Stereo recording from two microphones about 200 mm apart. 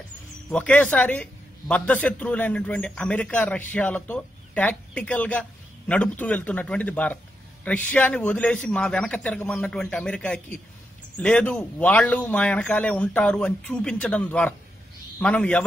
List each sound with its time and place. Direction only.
0.5 s a man's voice: 5° left (ahead or behind)